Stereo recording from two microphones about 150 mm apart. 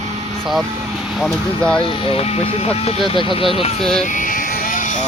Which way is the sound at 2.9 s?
35° left (ahead or behind).